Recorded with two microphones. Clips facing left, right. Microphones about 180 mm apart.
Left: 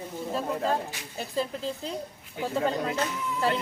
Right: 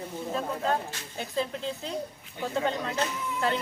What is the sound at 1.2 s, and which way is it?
Speech, 5° left (ahead or behind).